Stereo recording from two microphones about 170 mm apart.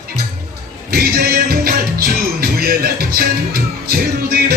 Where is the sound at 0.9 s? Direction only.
60° right (ahead or behind).